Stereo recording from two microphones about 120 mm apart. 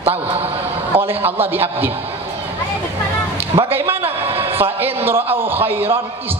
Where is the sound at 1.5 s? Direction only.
15° right (ahead or behind).